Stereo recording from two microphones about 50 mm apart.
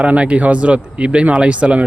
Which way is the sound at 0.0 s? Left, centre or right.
Right.